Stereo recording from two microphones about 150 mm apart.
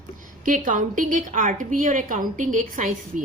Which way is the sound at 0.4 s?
60° right (ahead or behind).